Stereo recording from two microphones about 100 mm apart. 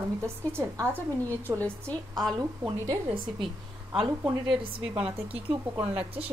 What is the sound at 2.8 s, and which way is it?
Speech, 30° right (ahead or behind).